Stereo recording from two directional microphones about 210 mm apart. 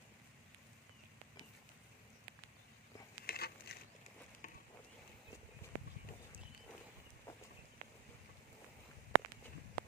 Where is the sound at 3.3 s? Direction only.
45° left (ahead or behind).